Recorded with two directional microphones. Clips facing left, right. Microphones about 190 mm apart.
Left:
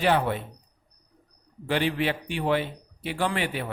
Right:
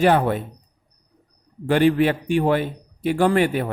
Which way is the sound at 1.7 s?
50° right (ahead or behind).